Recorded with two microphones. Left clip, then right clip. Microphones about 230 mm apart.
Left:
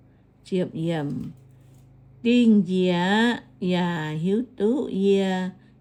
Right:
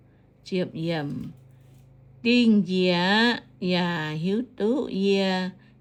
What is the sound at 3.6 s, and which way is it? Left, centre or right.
Speech, centre.